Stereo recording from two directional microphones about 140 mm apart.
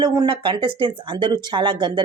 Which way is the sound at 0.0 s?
35° right (ahead or behind).